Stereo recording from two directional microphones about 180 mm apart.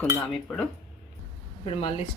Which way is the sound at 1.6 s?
30° left (ahead or behind).